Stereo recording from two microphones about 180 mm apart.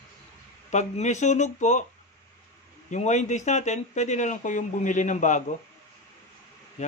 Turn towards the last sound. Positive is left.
turn(degrees=40)  # may be behind; listen again after turning